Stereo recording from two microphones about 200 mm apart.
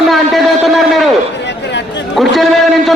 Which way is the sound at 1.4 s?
60° left (ahead or behind).